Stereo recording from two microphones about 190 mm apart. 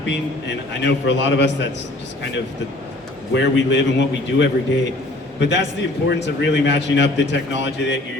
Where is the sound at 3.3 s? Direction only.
70° left (ahead or behind).